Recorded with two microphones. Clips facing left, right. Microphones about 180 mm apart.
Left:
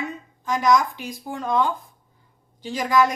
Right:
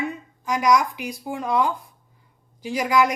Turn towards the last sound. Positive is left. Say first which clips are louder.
# even
turn(degrees=-10)  # may be behind; listen again after turning